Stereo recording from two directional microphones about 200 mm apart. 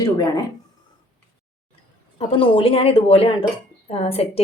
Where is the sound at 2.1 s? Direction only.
25° left (ahead or behind).